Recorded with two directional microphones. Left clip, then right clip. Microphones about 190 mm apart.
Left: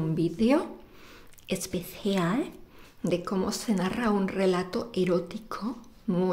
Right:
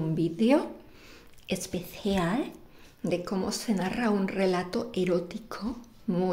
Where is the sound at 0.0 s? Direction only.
Centre (ahead or behind).